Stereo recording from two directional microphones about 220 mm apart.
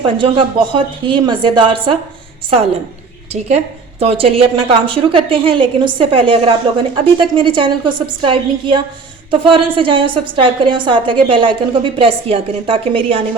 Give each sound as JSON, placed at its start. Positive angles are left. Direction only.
{"t": 0.0, "sound": "a woman's voice", "side_deg": -25}
{"t": 4.0, "sound": "a woman's voice", "side_deg": -25}